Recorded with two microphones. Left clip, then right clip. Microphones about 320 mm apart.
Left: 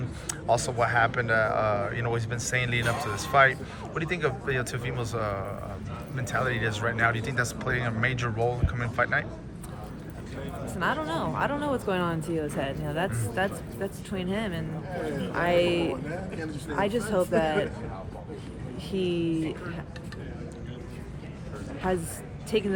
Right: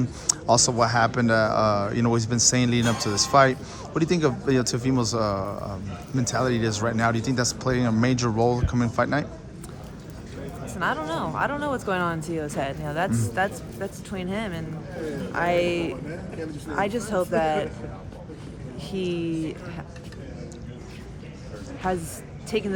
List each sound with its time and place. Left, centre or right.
0.3 s speech: right
10.8 s speech: centre
18.9 s speech: centre
21.8 s speech: centre